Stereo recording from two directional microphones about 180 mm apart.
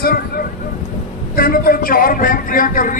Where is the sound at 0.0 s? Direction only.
55° left (ahead or behind).